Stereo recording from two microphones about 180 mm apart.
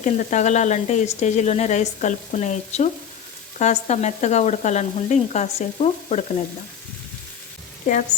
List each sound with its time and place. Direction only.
0.0 s speech: 45° left (ahead or behind)
7.9 s a woman's voice: 45° left (ahead or behind)